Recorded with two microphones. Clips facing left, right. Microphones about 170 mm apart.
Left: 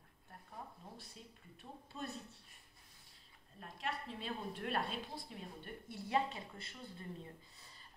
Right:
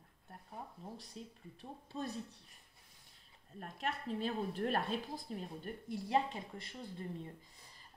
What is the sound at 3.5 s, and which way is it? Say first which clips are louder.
Speech: right 3 dB; 45° right (ahead or behind).